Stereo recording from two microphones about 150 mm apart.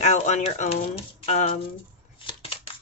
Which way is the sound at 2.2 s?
35° left (ahead or behind).